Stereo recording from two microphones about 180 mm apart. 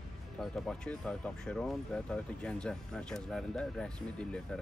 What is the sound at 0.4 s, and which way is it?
Speech, centre (ahead or behind).